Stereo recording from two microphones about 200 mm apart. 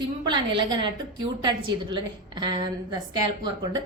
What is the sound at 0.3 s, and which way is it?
A woman's voice, 25° right (ahead or behind).